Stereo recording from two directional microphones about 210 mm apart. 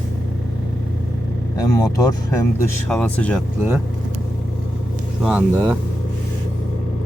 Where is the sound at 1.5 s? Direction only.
15° left (ahead or behind).